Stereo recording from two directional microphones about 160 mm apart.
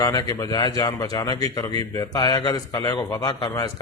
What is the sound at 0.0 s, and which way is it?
A man's voice, 25° left (ahead or behind).